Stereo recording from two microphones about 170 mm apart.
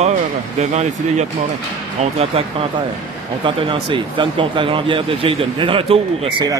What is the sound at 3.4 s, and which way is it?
Speech, 30° right (ahead or behind).